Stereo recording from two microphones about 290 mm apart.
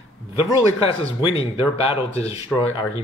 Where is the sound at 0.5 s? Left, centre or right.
Centre.